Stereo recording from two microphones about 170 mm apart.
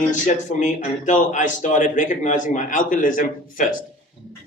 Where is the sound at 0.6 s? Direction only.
45° left (ahead or behind).